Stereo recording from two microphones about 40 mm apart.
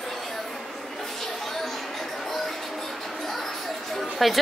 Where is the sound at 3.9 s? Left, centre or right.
Centre.